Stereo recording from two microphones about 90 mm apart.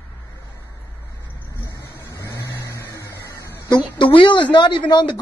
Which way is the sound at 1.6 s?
30° left (ahead or behind).